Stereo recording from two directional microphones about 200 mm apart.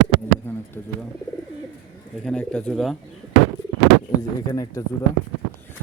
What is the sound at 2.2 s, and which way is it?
Speech, 5° left (ahead or behind).